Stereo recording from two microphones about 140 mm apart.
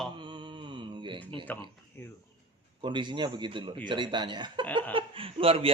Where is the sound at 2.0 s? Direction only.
15° left (ahead or behind).